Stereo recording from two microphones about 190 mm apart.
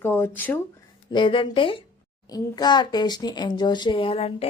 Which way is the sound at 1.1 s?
25° left (ahead or behind).